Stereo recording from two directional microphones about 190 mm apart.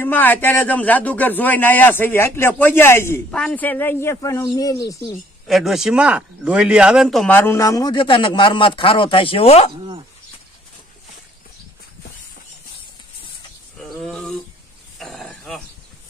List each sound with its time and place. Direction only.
0.0 s a man's voice: 10° left (ahead or behind)
5.5 s a man's voice: centre (ahead or behind); by 9.7 s 30° left (ahead or behind)
13.7 s a sound: centre (ahead or behind)